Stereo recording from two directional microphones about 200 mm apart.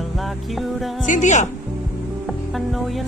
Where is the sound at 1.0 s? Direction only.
40° left (ahead or behind).